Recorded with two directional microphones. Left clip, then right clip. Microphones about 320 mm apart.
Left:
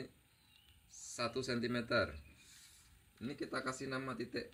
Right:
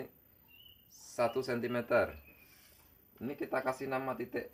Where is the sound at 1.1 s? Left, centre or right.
Right.